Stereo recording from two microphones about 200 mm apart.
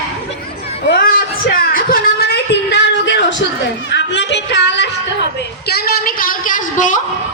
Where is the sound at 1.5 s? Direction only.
45° left (ahead or behind).